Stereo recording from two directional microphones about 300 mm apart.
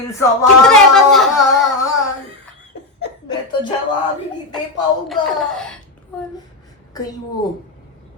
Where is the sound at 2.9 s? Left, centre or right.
Left.